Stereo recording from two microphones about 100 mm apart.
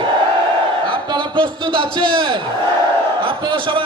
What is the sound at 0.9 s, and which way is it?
A man's voice, 55° right (ahead or behind).